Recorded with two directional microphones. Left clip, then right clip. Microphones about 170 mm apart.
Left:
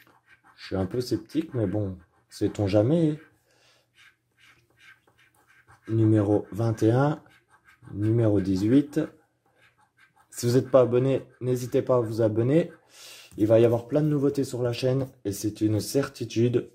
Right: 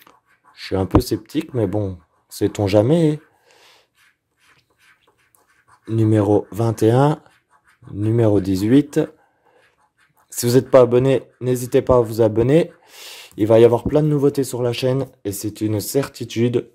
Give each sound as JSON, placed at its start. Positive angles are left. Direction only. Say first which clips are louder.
{"t": 0.6, "sound": "speech", "louder": "right 11 dB", "side_deg": -35}
{"t": 5.9, "sound": "speech", "louder": "right 6 dB", "side_deg": -30}
{"t": 10.3, "sound": "speech", "louder": "right 8 dB", "side_deg": -35}